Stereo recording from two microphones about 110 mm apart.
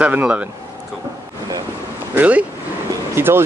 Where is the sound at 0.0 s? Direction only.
15° right (ahead or behind).